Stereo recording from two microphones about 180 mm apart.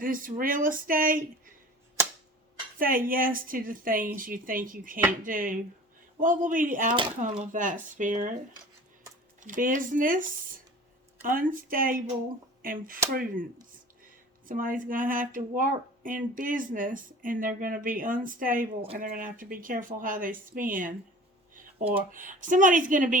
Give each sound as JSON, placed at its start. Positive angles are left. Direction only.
{"t": 0.0, "sound": "speech", "side_deg": -50}
{"t": 2.7, "sound": "speech", "side_deg": -50}
{"t": 9.4, "sound": "speech", "side_deg": -45}
{"t": 22.1, "sound": "speech", "side_deg": -50}